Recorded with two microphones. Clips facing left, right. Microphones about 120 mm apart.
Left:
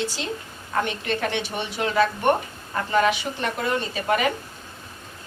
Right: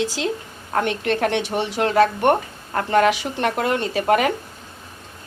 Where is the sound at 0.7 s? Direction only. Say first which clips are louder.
Right 4 dB; 70° right (ahead or behind).